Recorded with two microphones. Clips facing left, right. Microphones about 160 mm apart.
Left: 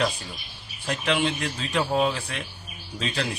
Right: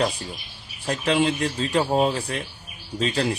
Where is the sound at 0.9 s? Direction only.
35° right (ahead or behind).